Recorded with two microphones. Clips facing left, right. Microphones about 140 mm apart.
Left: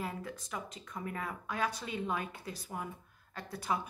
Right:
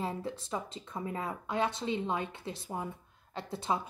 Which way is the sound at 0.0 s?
30° right (ahead or behind).